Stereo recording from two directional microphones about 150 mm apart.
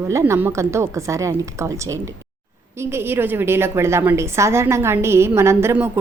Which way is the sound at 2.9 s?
15° right (ahead or behind).